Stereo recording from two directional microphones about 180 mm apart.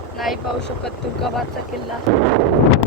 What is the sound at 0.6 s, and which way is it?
Speech, 70° left (ahead or behind).